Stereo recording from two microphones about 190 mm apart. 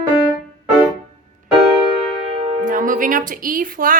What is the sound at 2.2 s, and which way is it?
Music, 30° right (ahead or behind).